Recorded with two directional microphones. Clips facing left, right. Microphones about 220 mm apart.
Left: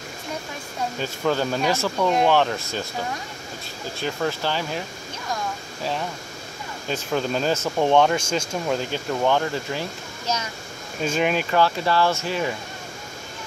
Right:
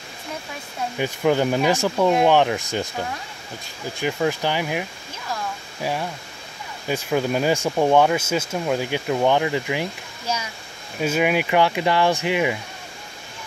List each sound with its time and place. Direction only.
0.9 s speech: 15° right (ahead or behind)
4.0 s speech: 15° right (ahead or behind)
5.3 s a sound: 10° right (ahead or behind)
6.9 s speech: 10° right (ahead or behind)